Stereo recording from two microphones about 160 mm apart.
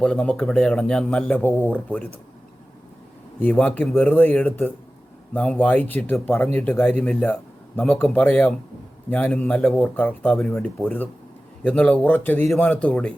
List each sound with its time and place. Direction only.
0.0 s speech: 5° left (ahead or behind)
3.4 s speech: 10° left (ahead or behind)